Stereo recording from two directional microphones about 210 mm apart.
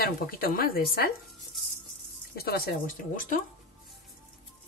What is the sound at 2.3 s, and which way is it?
Speech, 45° left (ahead or behind).